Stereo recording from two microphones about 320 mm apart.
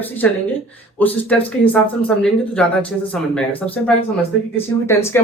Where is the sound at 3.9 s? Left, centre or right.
Centre.